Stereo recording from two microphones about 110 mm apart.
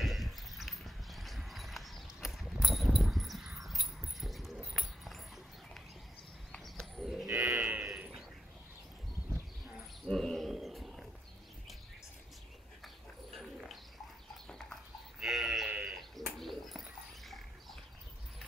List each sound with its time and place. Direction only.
0.0 s clip-clop: centre (ahead or behind)
4.7 s a sound: centre (ahead or behind)
6.5 s livestock: 5° left (ahead or behind)
7.4 s livestock: 20° right (ahead or behind)
7.8 s a sound: 5° right (ahead or behind)
10.0 s roaring cats: 5° left (ahead or behind)
12.8 s bird: centre (ahead or behind)
15.1 s sheep: centre (ahead or behind)